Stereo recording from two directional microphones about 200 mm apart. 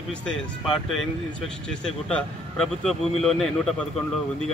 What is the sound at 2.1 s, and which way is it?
Speech, 5° left (ahead or behind).